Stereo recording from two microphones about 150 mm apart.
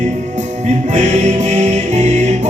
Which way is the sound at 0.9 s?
55° right (ahead or behind).